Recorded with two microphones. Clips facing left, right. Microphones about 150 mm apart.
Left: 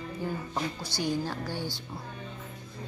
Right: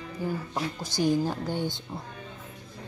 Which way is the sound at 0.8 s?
45° right (ahead or behind).